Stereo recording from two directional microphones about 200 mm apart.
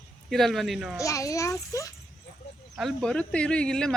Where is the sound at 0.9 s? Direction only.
15° left (ahead or behind).